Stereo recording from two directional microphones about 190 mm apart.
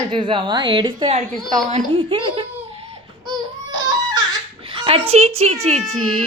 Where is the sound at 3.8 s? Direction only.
20° right (ahead or behind).